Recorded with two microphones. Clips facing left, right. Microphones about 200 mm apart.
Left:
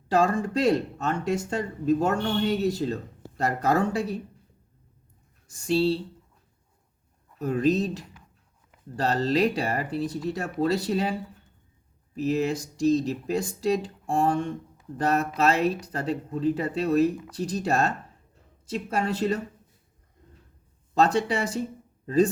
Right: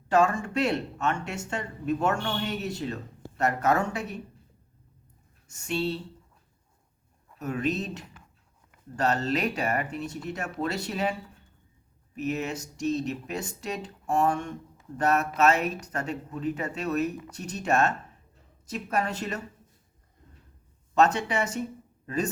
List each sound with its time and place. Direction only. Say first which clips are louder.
0.1 s speech: left 1 dB; 35° left (ahead or behind)
5.5 s speech: left 6 dB; 35° left (ahead or behind)
7.3 s speech: left 6 dB; 35° left (ahead or behind)
20.9 s speech: left 1 dB; 35° left (ahead or behind)